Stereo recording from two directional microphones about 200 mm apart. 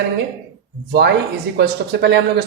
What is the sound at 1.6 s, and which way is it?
Speech, 60° right (ahead or behind).